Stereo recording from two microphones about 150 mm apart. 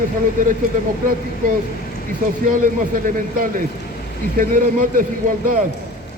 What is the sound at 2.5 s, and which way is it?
Speech, 60° right (ahead or behind).